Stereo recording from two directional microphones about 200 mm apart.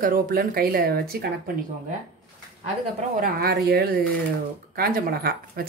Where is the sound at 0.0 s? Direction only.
45° right (ahead or behind).